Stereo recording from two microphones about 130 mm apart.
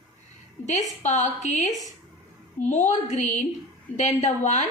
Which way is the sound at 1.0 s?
65° left (ahead or behind).